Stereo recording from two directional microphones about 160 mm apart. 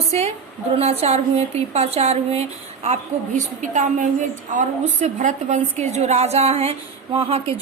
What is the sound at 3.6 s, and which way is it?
A woman's voice, 50° right (ahead or behind).